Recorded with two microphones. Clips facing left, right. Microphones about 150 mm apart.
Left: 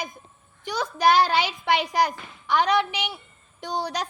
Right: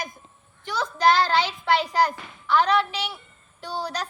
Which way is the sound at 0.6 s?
15° left (ahead or behind).